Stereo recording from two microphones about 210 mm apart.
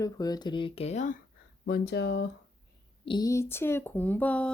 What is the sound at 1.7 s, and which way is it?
Speech, 50° left (ahead or behind).